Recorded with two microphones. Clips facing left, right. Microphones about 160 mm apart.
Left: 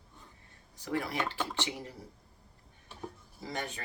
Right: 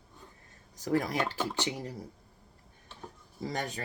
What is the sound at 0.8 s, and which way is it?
Cutlery, 40° right (ahead or behind).